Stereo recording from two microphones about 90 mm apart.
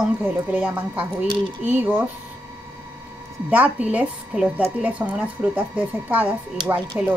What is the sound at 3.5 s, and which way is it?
A woman's voice, 15° right (ahead or behind).